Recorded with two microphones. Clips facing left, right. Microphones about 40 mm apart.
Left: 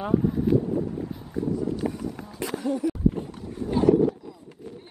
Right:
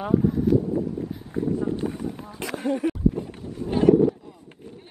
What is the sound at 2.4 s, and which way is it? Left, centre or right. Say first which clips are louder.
Speech: right 1 dB; right.